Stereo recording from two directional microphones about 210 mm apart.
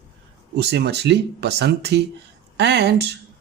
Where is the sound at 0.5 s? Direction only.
55° right (ahead or behind).